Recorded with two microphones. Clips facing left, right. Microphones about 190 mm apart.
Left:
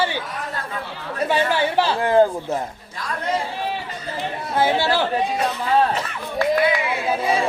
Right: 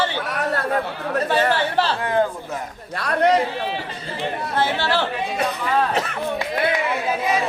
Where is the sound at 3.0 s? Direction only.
70° right (ahead or behind).